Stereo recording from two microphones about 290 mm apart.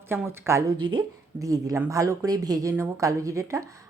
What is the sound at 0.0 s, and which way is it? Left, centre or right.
A woman's voice, centre.